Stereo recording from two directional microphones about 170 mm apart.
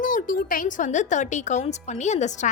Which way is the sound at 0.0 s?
50° left (ahead or behind).